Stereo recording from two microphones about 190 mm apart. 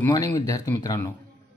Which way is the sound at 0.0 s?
20° left (ahead or behind).